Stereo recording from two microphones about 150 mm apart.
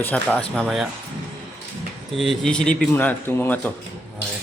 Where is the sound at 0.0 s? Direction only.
10° left (ahead or behind).